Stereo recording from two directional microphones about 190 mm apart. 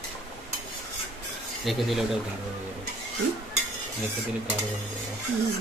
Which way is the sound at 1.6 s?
Centre (ahead or behind).